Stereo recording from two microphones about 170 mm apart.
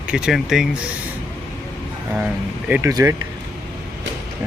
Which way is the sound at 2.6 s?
10° right (ahead or behind).